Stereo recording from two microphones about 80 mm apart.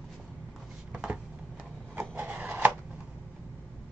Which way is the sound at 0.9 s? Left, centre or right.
Centre.